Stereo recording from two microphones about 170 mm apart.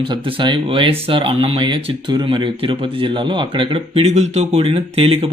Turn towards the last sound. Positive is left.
turn(degrees=-35)  # may be behind; listen again after turning